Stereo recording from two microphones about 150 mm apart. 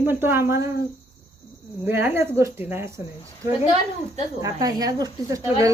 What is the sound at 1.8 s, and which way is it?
Speech, 15° right (ahead or behind).